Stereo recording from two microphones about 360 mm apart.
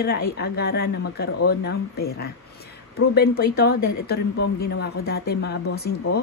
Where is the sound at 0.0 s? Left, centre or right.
Left.